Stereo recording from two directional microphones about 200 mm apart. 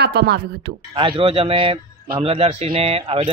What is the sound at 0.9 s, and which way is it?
Speech, 30° right (ahead or behind).